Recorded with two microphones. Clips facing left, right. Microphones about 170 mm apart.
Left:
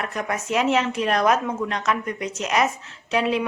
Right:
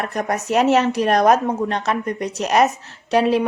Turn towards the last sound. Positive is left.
turn(degrees=-40)  # may be behind; listen again after turning